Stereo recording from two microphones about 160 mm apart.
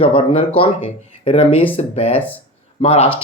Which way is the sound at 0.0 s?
35° left (ahead or behind).